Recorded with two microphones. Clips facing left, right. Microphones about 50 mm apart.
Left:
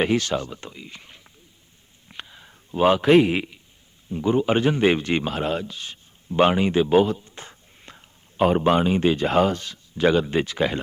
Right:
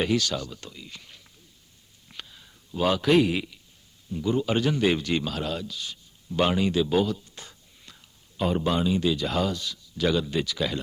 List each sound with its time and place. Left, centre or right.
0.0 s speech: left
2.0 s a sound: left
4.1 s a man's voice: left